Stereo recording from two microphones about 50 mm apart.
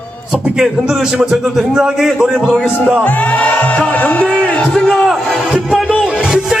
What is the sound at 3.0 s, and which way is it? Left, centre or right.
Music, left.